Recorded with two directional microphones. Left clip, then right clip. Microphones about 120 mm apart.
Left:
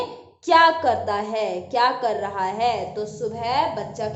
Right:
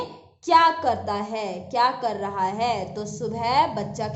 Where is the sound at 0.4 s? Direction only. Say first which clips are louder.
Left 2 dB; 35° right (ahead or behind).